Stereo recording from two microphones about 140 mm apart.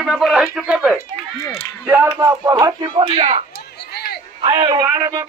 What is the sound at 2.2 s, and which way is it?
Speech, 25° right (ahead or behind).